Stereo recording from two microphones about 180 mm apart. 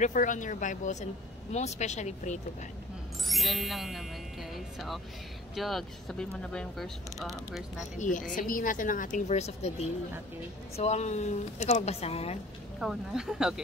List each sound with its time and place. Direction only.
0.0 s a woman's voice: 45° left (ahead or behind)
3.3 s speech: centre (ahead or behind)
8.0 s a woman's voice: 45° left (ahead or behind)
12.8 s speech: 5° right (ahead or behind)